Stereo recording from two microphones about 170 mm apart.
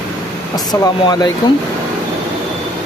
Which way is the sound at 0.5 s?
20° left (ahead or behind).